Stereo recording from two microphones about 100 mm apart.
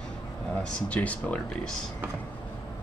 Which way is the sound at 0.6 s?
10° left (ahead or behind).